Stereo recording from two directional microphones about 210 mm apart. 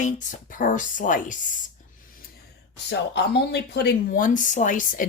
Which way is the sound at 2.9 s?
55° left (ahead or behind).